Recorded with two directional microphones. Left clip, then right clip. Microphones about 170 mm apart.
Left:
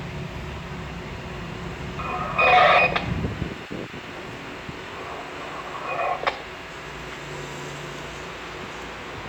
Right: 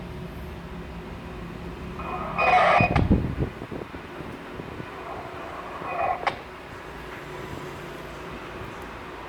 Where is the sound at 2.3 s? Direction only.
30° right (ahead or behind).